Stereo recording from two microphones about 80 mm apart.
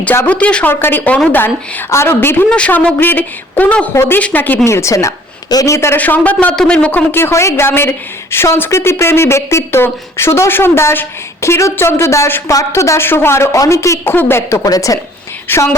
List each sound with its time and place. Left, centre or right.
0.3 s speech: centre
2.5 s speech: centre
3.9 s a woman's voice: left
4.2 s speech: left
4.6 s a woman's voice: left
5.5 s a man's voice: left
5.7 s a woman's voice: left
6.0 s speech: centre
7.1 s a woman's voice: left
14.0 s a woman's voice: left
14.7 s a woman's voice: left